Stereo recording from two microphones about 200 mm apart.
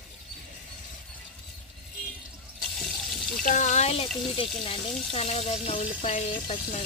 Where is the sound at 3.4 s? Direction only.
40° left (ahead or behind).